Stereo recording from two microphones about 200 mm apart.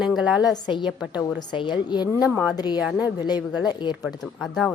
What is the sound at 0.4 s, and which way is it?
A woman's voice, 20° left (ahead or behind).